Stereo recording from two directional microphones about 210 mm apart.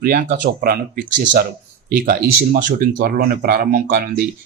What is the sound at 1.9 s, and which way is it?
Speech, 45° right (ahead or behind).